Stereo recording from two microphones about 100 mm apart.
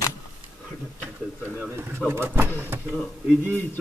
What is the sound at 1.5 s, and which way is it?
A man's voice, 20° right (ahead or behind).